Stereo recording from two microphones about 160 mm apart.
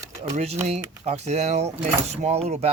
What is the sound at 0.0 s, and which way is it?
Typing, 20° right (ahead or behind).